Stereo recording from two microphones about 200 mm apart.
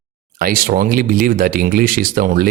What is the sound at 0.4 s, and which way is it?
Speech, 45° right (ahead or behind).